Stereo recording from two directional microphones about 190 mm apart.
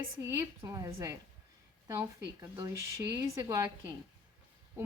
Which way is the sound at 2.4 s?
20° right (ahead or behind).